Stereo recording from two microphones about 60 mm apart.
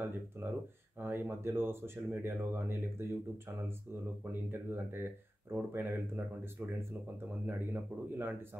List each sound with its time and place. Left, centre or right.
0.0 s speech: right